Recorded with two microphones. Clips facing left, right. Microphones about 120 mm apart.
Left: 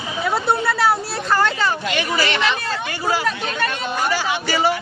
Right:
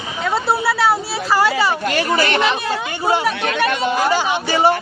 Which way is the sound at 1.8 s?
50° right (ahead or behind).